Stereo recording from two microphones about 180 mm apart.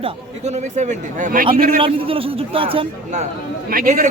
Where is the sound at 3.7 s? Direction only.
50° right (ahead or behind).